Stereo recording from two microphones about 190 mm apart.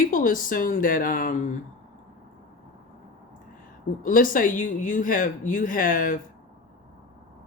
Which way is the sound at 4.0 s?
45° left (ahead or behind).